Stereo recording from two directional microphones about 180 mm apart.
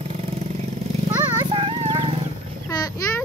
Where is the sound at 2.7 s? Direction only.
20° left (ahead or behind).